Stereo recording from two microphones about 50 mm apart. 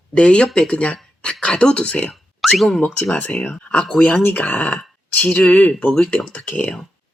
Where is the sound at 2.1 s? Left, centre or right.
Centre.